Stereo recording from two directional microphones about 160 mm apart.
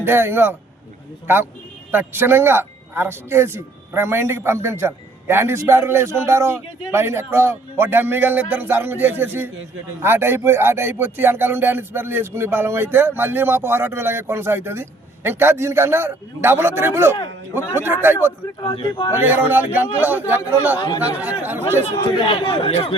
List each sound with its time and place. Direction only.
0.0 s a man's voice: 15° right (ahead or behind)
1.9 s a man's voice: 15° right (ahead or behind)
18.6 s a man's voice: 30° left (ahead or behind)
19.1 s a man's voice: 10° right (ahead or behind)
20.7 s speech: 25° left (ahead or behind)
21.2 s a man's voice: 10° right (ahead or behind)
21.9 s a man's voice: 30° left (ahead or behind)